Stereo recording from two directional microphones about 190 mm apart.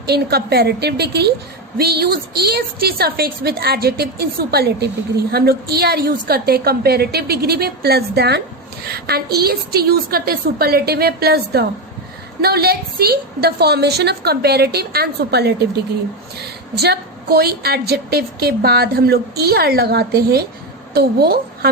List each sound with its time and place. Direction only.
0.0 s a woman's voice: 55° right (ahead or behind)